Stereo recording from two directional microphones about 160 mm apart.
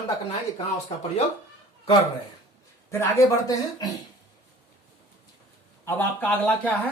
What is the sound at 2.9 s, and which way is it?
Speech, 20° left (ahead or behind).